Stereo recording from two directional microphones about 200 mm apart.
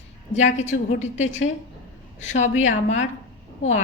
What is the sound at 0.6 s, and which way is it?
A woman's voice, 35° left (ahead or behind).